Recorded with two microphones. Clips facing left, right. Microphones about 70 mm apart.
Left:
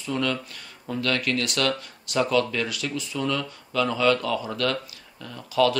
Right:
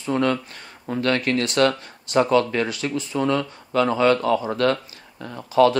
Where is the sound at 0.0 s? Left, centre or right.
Right.